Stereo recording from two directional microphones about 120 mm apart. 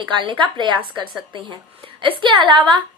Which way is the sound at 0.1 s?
45° right (ahead or behind).